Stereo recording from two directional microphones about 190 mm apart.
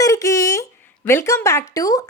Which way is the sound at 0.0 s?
20° left (ahead or behind).